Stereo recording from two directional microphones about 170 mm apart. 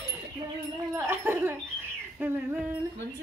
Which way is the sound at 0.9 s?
15° right (ahead or behind).